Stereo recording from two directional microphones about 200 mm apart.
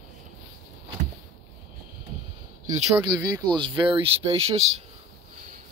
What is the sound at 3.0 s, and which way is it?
Speech, 20° right (ahead or behind).